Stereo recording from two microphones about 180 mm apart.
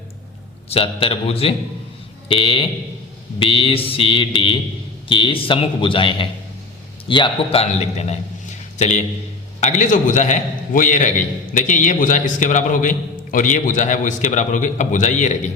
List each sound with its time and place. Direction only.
0.7 s a man's voice: 30° left (ahead or behind)
2.3 s mantra: 30° left (ahead or behind)
7.1 s a man's voice: 30° left (ahead or behind)
9.6 s a man's voice: 40° left (ahead or behind)